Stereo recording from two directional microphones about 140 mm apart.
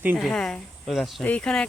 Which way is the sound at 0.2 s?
5° left (ahead or behind).